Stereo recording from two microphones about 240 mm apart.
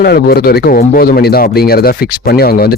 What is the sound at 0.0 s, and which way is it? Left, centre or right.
Speech, left.